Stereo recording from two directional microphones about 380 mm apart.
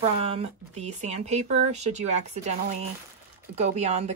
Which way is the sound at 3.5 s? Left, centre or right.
Centre.